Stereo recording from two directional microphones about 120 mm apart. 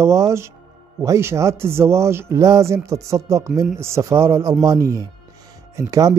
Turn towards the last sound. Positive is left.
turn(degrees=-30)  # may be behind; listen again after turning